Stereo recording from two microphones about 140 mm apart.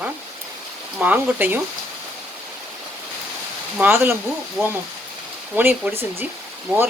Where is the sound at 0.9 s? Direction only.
10° right (ahead or behind).